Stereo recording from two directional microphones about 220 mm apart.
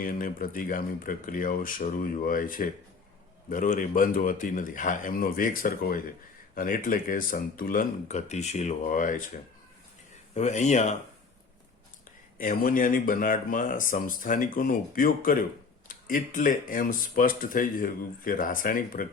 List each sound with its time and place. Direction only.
0.0 s speech: 40° left (ahead or behind)
10.3 s speech: 30° left (ahead or behind)
12.4 s speech: 40° left (ahead or behind)